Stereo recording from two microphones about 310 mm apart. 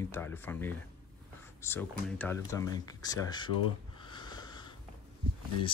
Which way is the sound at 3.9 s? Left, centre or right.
Centre.